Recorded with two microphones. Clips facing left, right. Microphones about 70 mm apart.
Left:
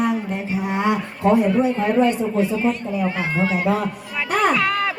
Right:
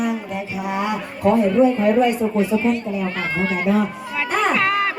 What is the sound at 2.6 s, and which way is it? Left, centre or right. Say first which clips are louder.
A woman's voice: even; centre.